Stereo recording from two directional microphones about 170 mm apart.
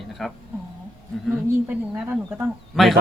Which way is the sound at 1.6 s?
10° right (ahead or behind).